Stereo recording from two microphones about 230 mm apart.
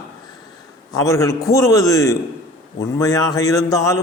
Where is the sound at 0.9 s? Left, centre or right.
Centre.